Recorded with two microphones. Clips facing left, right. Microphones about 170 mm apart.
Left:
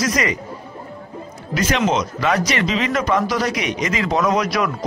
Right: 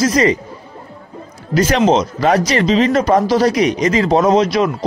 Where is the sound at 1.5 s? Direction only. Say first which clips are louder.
Right 6 dB; 35° right (ahead or behind).